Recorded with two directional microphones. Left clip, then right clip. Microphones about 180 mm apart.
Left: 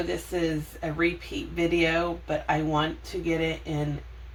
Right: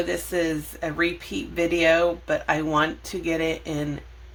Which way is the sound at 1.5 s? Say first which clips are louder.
Right 5 dB; 45° right (ahead or behind).